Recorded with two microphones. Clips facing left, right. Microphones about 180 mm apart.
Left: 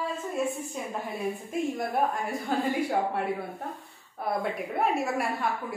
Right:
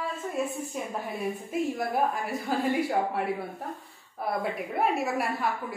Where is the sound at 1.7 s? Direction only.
Centre (ahead or behind).